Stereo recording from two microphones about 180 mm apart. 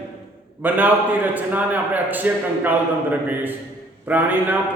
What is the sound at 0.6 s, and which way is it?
A man's voice, 10° right (ahead or behind).